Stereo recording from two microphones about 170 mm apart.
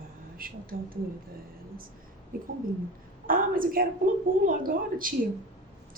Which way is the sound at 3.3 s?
55° right (ahead or behind).